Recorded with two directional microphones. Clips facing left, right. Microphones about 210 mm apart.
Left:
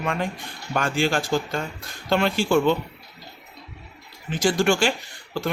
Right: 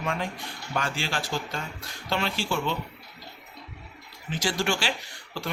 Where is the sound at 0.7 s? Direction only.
50° left (ahead or behind).